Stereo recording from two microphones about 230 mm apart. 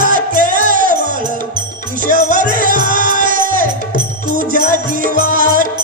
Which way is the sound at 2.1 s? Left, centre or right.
Right.